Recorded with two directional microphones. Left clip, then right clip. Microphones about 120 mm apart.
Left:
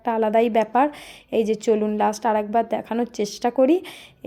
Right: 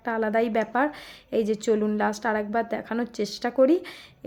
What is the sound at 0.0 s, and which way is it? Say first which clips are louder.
A woman's voice: left 5 dB; 20° left (ahead or behind).